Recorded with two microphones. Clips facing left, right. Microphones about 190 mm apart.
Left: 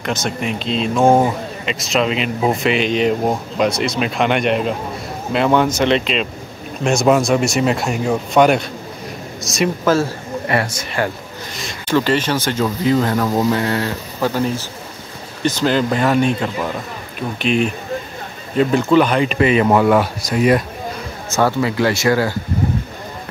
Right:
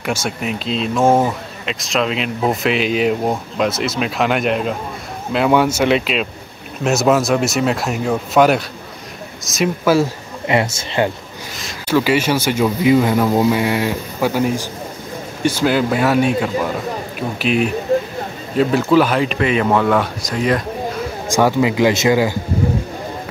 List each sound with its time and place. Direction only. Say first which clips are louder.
0.0 s speech: even; 10° right (ahead or behind)
9.9 s speech: right 2 dB; 20° right (ahead or behind)
11.5 s speech: right 1 dB; 5° right (ahead or behind)
21.3 s speech: right 2 dB; 15° right (ahead or behind)